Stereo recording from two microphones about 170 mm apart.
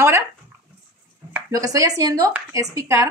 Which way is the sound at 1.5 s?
20° right (ahead or behind).